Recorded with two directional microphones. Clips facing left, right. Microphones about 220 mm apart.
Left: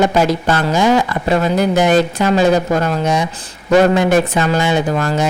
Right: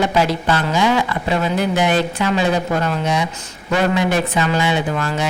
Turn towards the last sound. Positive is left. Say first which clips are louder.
# left 4 dB
turn(degrees=40)  # may be behind; listen again after turning